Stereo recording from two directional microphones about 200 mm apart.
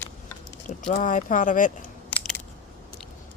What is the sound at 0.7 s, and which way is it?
Speech, 40° left (ahead or behind).